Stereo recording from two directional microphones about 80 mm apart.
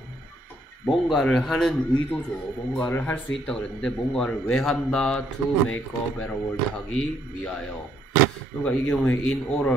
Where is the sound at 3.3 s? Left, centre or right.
Centre.